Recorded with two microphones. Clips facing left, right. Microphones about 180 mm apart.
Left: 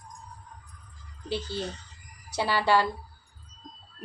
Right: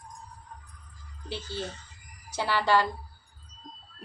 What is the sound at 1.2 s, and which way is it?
A woman's voice, 15° left (ahead or behind).